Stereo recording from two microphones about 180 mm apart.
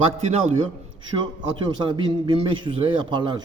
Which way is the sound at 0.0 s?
35° right (ahead or behind).